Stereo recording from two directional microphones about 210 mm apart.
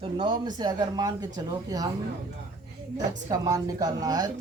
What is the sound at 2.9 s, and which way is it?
Speech, 15° right (ahead or behind).